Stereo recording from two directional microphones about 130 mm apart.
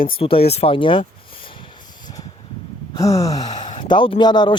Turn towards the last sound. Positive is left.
turn(degrees=35)  # may be behind; listen again after turning